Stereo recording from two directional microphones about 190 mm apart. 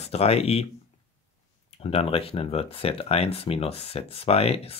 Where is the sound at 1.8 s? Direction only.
30° left (ahead or behind).